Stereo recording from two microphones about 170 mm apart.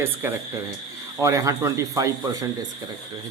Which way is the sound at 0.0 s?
10° right (ahead or behind).